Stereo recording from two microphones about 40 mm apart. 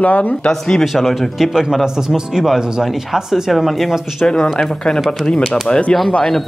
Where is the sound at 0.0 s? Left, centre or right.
Left.